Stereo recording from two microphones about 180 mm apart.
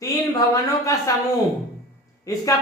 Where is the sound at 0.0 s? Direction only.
20° left (ahead or behind).